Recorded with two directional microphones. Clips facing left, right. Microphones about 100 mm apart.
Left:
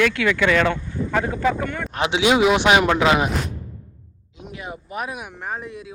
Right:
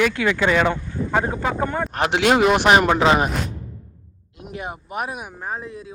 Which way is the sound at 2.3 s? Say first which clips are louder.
Even; centre (ahead or behind).